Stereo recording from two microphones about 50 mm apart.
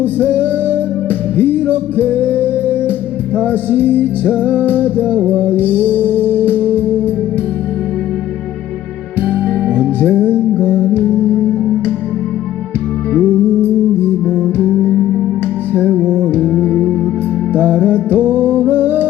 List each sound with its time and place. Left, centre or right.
0.0 s music: right
3.5 s music: right
4.6 s music: left
4.9 s music: right
9.2 s music: right
14.0 s music: right
15.9 s music: right
17.5 s music: right